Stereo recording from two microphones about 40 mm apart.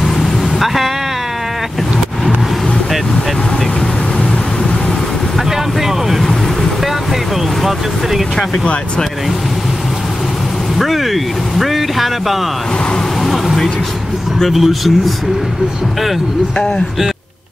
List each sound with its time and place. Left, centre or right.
0.0 s vehicle: centre
5.8 s vehicle: centre
10.8 s speech: centre
14.5 s speech: centre